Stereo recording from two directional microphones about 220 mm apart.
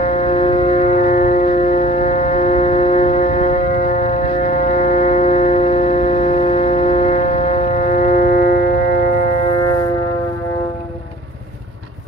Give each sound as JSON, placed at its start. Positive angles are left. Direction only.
{"t": 0.0, "sound": "music", "side_deg": 30}
{"t": 9.5, "sound": "music", "side_deg": 20}